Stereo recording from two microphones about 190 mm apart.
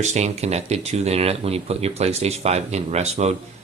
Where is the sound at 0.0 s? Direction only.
35° right (ahead or behind).